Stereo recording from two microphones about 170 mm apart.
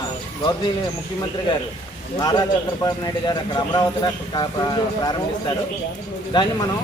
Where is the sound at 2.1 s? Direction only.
25° left (ahead or behind).